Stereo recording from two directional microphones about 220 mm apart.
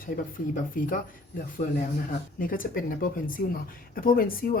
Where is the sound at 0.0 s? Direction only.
40° left (ahead or behind).